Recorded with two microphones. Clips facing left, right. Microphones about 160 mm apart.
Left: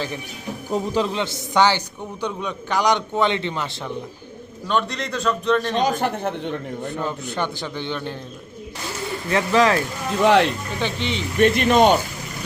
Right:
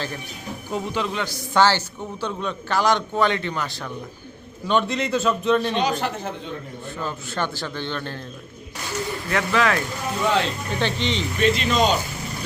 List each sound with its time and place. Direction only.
0.7 s a man's voice: 35° left (ahead or behind)
4.7 s a man's voice: centre (ahead or behind)
6.0 s speech: 60° left (ahead or behind)
7.0 s a man's voice: 15° left (ahead or behind)
9.3 s speech: 30° left (ahead or behind)
10.2 s speech: 70° left (ahead or behind)
10.8 s a man's voice: 10° left (ahead or behind)
11.3 s speech: 55° left (ahead or behind)